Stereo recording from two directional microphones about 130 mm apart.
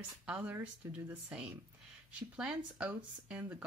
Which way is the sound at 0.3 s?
10° right (ahead or behind).